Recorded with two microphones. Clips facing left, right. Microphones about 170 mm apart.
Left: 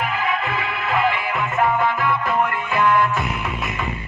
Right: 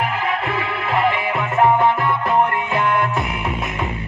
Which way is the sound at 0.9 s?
30° right (ahead or behind).